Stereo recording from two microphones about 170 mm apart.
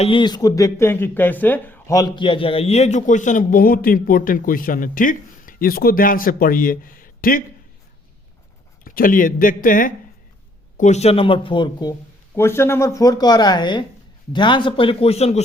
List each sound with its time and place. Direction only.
0.0 s speech: 30° left (ahead or behind); by 2.0 s 10° left (ahead or behind)
2.0 s a man's voice: 25° left (ahead or behind); by 7.4 s 55° left (ahead or behind)
8.8 s speech: 55° left (ahead or behind)
10.8 s speech: 45° left (ahead or behind); by 11.9 s 25° left (ahead or behind)
12.3 s speech: 15° left (ahead or behind); by 15.4 s 40° left (ahead or behind)